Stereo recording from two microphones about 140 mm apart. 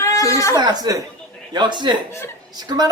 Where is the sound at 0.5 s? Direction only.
30° right (ahead or behind).